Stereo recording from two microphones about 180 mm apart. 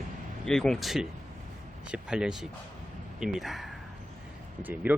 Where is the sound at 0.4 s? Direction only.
5° left (ahead or behind).